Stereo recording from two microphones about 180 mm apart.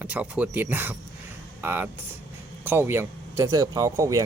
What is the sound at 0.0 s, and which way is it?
Speech, 10° right (ahead or behind).